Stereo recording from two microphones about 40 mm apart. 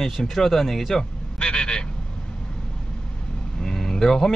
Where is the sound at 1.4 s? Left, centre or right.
Left.